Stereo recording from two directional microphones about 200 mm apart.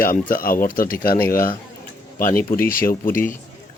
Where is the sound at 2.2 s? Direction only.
45° left (ahead or behind).